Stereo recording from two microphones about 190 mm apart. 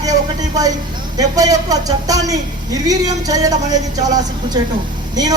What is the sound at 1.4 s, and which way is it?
A woman's voice, 20° right (ahead or behind).